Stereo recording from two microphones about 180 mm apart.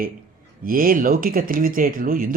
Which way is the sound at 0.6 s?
50° right (ahead or behind).